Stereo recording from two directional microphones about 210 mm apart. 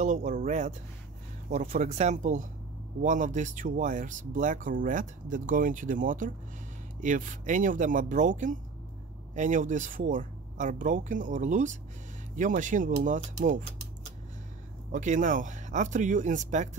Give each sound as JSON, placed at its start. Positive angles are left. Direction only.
{"t": 0.0, "sound": "speech", "side_deg": -35}
{"t": 14.9, "sound": "speech", "side_deg": -35}